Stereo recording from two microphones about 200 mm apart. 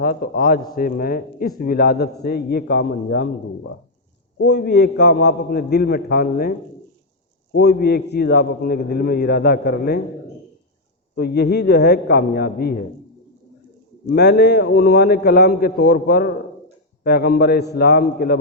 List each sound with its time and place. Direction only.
0.0 s a man's voice: 45° left (ahead or behind)
7.5 s a man's voice: 55° left (ahead or behind)
11.1 s a man's voice: 55° left (ahead or behind)
14.1 s a man's voice: 55° left (ahead or behind)